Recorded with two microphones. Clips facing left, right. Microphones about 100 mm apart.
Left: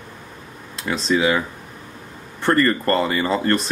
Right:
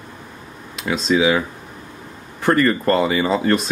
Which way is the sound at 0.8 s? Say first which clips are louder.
Right 2 dB; 5° right (ahead or behind).